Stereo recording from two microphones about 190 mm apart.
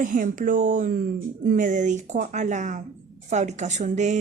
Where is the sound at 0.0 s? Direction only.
45° right (ahead or behind).